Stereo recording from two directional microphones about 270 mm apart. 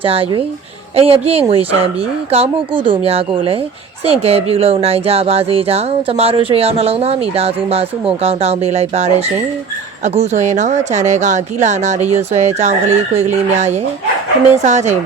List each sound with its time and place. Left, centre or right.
0.0 s speech: right